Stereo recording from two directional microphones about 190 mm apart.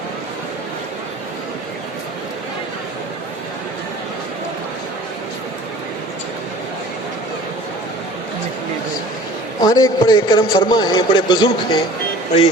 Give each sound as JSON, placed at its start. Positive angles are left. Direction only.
{"t": 9.6, "sound": "a man's voice", "side_deg": 20}